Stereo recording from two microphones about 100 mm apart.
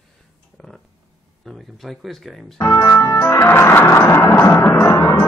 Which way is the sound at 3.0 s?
30° left (ahead or behind).